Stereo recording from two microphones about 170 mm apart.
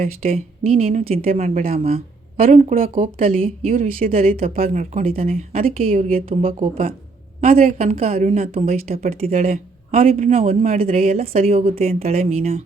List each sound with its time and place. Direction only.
0.2 s speech: 40° right (ahead or behind)
1.2 s speech: 50° right (ahead or behind)
2.4 s speech: 50° right (ahead or behind)
4.0 s speech: 40° right (ahead or behind)
5.6 s speech: 55° right (ahead or behind)
6.1 s speech: 35° right (ahead or behind)